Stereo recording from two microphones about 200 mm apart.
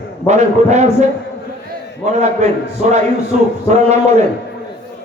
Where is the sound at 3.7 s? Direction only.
35° right (ahead or behind).